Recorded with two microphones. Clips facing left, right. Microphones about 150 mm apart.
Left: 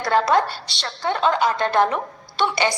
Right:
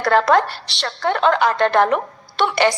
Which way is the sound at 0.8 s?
55° right (ahead or behind).